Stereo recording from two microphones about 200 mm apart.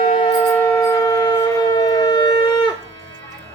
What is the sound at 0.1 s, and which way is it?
Shofar, 25° left (ahead or behind).